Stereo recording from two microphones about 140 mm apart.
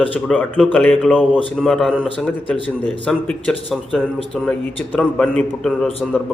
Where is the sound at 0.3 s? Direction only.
5° left (ahead or behind).